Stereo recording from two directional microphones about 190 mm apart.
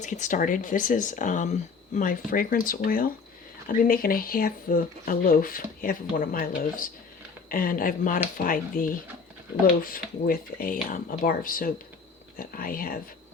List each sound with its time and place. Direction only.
0.0 s speech: 40° left (ahead or behind)